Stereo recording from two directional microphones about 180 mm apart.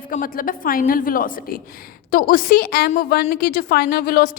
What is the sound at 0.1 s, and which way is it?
A woman's voice, 50° left (ahead or behind).